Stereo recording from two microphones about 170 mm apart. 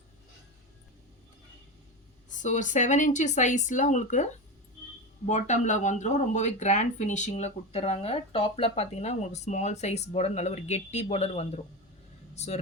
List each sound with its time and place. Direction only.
2.3 s speech: 45° left (ahead or behind)